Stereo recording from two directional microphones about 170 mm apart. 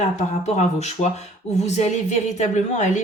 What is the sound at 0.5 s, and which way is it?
A woman's voice, 45° left (ahead or behind).